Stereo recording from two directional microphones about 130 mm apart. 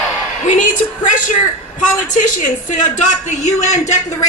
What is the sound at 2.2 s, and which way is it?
A woman's voice, 80° left.